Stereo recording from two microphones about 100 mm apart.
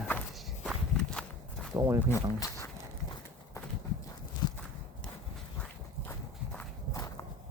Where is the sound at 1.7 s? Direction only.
40° right (ahead or behind).